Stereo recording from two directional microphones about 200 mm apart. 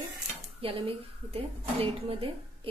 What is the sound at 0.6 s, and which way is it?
Speech, 25° right (ahead or behind).